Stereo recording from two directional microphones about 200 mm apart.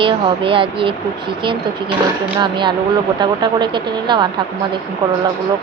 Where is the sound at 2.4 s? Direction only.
20° right (ahead or behind).